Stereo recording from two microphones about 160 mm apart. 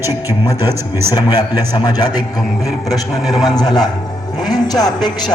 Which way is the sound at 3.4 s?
25° left (ahead or behind).